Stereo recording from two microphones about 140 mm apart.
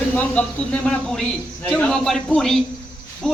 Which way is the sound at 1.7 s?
5° left (ahead or behind).